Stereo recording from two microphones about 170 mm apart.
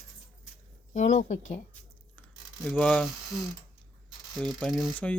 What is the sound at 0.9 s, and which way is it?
Speech, 45° left (ahead or behind).